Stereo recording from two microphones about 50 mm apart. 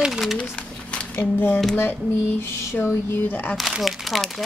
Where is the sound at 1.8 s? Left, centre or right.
Left.